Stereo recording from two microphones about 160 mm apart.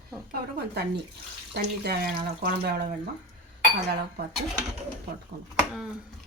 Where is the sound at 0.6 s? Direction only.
90° right.